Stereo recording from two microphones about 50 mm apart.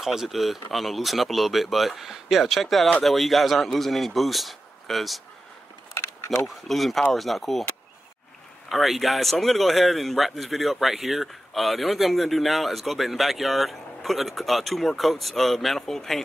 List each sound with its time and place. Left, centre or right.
0.0 s speech: centre
5.9 s a sound: left
6.4 s speech: centre
8.6 s speech: centre